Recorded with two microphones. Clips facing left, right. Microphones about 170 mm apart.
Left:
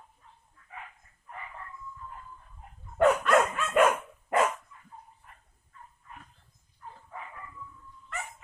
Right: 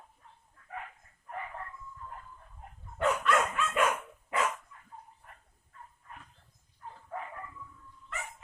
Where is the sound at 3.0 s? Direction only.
50° left (ahead or behind).